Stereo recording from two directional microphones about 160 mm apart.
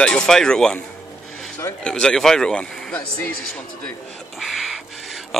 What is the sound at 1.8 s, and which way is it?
A man's voice, 5° left (ahead or behind).